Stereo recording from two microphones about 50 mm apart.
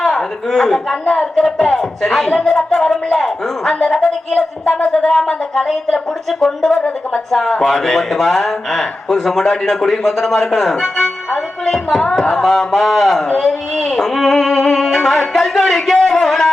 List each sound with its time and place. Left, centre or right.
0.0 s a man's voice: centre
4.3 s speech: centre
13.4 s music: centre